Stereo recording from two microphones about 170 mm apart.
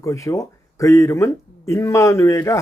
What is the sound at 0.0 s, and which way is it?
Speech, 20° left (ahead or behind).